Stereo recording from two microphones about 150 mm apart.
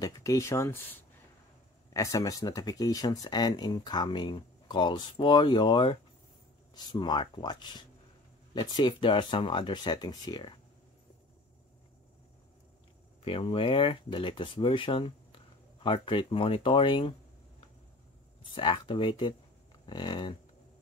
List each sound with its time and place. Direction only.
0.0 s speech: 20° left (ahead or behind)
13.2 s speech: 35° left (ahead or behind)
18.5 s speech: 35° left (ahead or behind)